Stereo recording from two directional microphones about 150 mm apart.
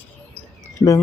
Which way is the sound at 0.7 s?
20° left (ahead or behind).